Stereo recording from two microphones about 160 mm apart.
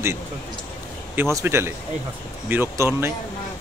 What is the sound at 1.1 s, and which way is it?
Speech, 15° right (ahead or behind).